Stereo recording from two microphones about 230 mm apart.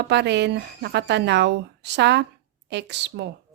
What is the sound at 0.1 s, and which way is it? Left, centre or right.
A woman's voice, right.